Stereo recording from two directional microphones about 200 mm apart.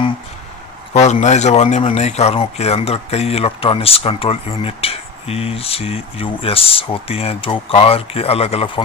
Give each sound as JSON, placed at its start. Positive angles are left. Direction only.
{"t": 0.9, "sound": "speech", "side_deg": 35}